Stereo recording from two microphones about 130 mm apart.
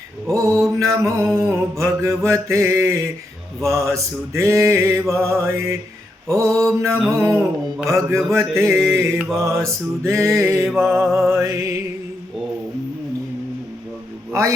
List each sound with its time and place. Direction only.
0.3 s mantra: 25° right (ahead or behind)